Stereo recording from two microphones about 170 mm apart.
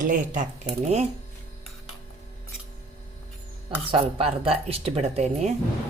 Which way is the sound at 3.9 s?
30° right (ahead or behind).